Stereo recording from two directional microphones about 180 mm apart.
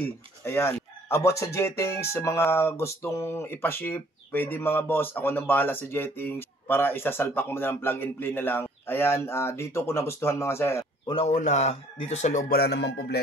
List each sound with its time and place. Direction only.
0.0 s speech: 15° left (ahead or behind)
11.1 s speech: 35° left (ahead or behind); by 13.2 s 65° left (ahead or behind)